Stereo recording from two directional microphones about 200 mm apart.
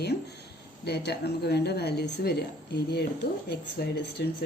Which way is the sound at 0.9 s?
55° left (ahead or behind).